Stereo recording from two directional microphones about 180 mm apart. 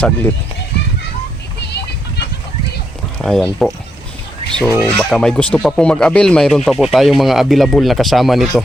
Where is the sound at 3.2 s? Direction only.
Centre (ahead or behind).